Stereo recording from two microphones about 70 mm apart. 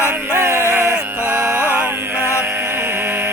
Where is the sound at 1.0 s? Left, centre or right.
Right.